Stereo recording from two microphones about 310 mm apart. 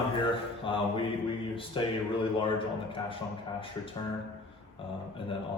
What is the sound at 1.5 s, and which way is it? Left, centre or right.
Speech, centre.